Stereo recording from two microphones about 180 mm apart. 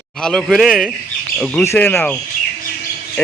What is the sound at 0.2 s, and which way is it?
A man's voice, 5° left (ahead or behind).